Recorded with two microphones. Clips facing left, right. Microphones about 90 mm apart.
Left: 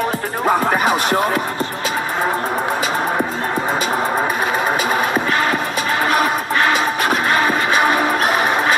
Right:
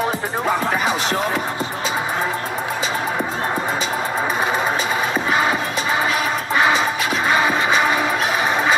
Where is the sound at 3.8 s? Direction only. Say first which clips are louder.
Left 4 dB; 55° left (ahead or behind).